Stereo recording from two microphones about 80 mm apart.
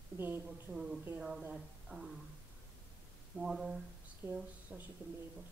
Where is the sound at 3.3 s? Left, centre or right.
Centre.